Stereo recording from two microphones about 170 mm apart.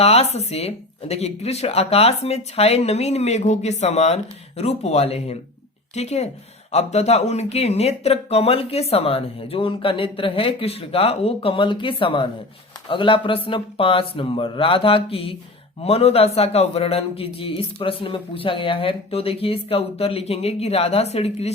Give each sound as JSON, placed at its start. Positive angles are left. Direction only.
{"t": 0.0, "sound": "a man's voice", "side_deg": 35}